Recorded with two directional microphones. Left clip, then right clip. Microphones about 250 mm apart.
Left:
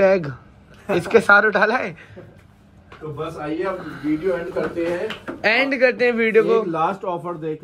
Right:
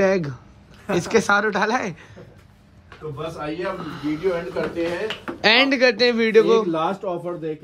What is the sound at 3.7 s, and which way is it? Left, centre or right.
Speech, centre.